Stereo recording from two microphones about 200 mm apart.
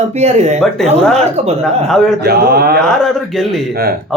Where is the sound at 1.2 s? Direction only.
30° right (ahead or behind).